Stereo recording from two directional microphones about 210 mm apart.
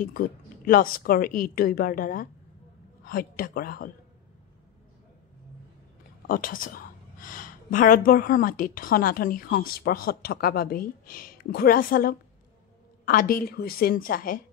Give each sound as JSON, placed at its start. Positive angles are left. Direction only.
{"t": 0.0, "sound": "a woman's voice", "side_deg": 40}
{"t": 6.2, "sound": "a woman's voice", "side_deg": 40}